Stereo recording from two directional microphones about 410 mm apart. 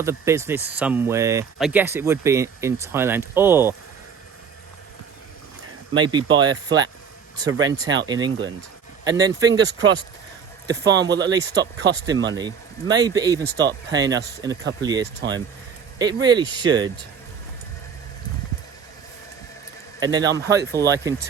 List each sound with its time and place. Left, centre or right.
0.0 s speech: centre
5.9 s speech: centre
11.3 s speech: right
12.3 s speech: centre
13.4 s speech: right
13.7 s speech: centre
20.0 s a man's voice: centre